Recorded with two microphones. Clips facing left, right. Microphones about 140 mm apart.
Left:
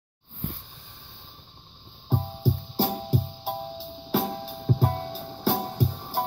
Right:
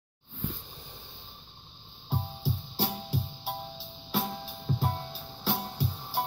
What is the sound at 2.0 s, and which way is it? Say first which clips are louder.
Music: left 6 dB; 45° left (ahead or behind).